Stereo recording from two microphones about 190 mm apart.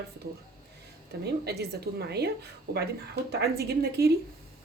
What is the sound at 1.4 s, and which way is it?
Speech, 55° right (ahead or behind).